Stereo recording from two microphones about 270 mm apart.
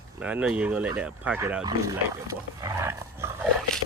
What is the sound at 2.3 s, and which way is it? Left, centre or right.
Dog, centre.